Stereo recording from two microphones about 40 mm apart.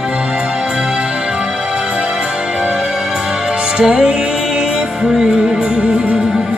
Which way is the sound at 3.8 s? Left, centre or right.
Right.